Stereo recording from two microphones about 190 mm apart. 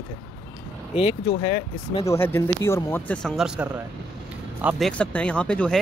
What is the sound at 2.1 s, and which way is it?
Speech, 15° left (ahead or behind).